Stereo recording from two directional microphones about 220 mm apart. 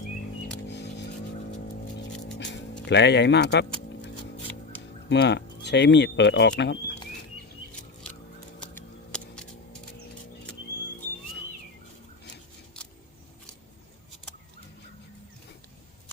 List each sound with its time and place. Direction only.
2.8 s speech: 50° left (ahead or behind)
5.0 s speech: 50° left (ahead or behind)
8.5 s scissors: 5° left (ahead or behind)